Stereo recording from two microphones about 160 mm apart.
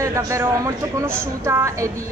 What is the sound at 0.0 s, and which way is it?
A man's voice, 20° right (ahead or behind).